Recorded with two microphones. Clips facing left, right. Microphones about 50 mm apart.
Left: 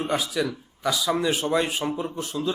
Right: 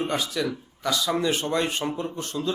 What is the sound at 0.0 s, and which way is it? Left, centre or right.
A man's voice, centre.